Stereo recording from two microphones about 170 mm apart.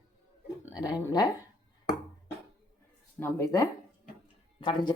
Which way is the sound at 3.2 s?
15° left (ahead or behind).